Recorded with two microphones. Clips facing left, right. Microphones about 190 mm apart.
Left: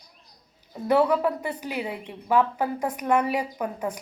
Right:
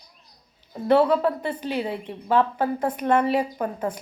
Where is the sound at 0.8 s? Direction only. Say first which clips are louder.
Right 2 dB; 15° left (ahead or behind).